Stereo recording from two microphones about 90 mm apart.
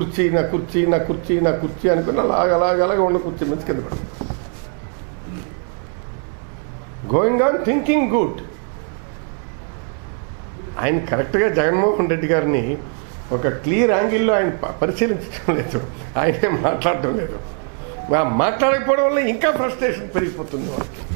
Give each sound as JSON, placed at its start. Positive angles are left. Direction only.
{"t": 0.0, "sound": "speech", "side_deg": -15}
{"t": 7.1, "sound": "speech", "side_deg": -20}
{"t": 10.8, "sound": "speech", "side_deg": -20}